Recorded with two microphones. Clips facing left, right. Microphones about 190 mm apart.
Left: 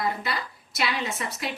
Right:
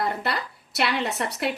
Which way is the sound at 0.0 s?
65° right (ahead or behind).